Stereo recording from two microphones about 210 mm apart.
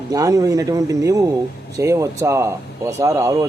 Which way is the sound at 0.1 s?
15° right (ahead or behind).